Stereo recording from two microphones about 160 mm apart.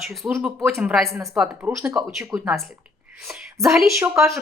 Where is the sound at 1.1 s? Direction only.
15° right (ahead or behind).